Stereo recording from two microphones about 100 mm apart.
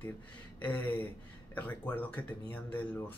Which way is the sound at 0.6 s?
15° left (ahead or behind).